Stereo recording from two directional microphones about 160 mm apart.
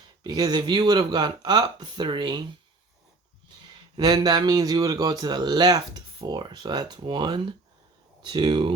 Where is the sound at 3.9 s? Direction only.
25° right (ahead or behind).